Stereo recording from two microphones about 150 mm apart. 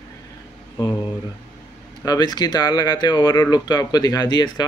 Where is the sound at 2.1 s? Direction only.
25° left (ahead or behind).